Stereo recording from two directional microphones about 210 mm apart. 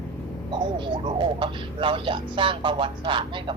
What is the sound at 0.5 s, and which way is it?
Speech, 20° right (ahead or behind).